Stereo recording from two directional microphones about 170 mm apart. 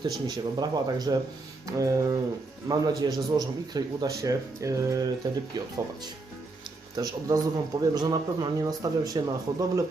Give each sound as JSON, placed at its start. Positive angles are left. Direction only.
{"t": 0.0, "sound": "speech", "side_deg": -25}
{"t": 6.9, "sound": "speech", "side_deg": -20}